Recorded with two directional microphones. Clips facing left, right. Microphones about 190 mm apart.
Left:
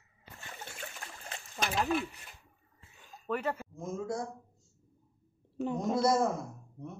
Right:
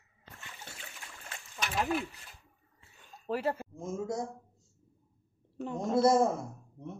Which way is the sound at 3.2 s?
35° right (ahead or behind).